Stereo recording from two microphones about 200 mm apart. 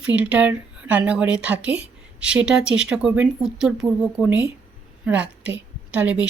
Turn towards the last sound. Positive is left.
turn(degrees=-5)  # may be behind; listen again after turning